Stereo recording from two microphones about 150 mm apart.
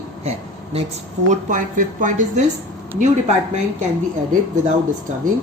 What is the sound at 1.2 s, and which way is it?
Speech, 60° right (ahead or behind).